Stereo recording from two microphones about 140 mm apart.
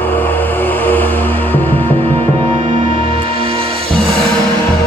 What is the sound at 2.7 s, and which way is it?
Music, 40° right (ahead or behind).